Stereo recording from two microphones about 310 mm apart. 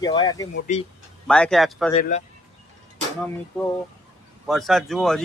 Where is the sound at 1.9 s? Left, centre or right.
Left.